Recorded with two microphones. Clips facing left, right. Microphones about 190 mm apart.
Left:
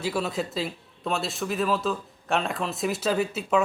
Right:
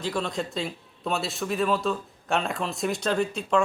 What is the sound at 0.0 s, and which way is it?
A man's voice, 5° left (ahead or behind).